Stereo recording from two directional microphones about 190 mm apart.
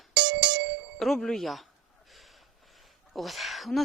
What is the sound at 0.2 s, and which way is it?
Music, 75° right (ahead or behind).